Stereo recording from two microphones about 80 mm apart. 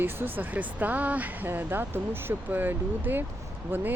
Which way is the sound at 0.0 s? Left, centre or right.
Right.